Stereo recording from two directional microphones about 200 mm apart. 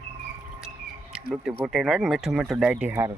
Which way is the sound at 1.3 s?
Centre (ahead or behind).